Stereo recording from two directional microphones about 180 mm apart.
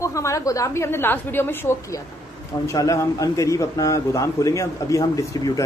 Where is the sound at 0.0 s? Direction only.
15° left (ahead or behind).